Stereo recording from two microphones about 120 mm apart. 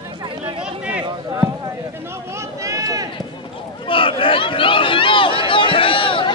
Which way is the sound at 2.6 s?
25° right (ahead or behind).